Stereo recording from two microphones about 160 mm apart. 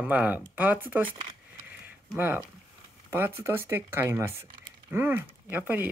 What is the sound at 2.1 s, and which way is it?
Speech, 10° right (ahead or behind).